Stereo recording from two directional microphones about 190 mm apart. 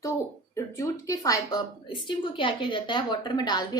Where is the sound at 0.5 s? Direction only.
15° left (ahead or behind).